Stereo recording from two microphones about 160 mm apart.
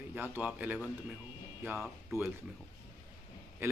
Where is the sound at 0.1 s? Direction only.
10° right (ahead or behind).